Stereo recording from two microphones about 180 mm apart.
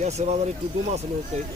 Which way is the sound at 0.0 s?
35° right (ahead or behind).